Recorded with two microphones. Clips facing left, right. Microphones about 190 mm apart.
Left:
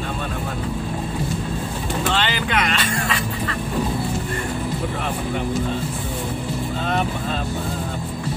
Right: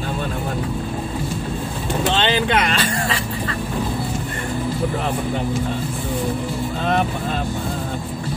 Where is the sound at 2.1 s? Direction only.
25° right (ahead or behind).